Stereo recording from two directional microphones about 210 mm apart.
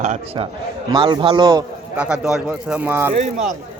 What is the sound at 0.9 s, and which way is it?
Speech, 20° right (ahead or behind).